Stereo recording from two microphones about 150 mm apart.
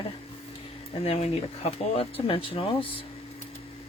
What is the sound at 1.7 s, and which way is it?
Speech, 40° left (ahead or behind).